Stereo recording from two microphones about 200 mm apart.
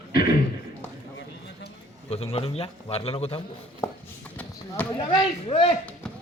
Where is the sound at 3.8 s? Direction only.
15° left (ahead or behind).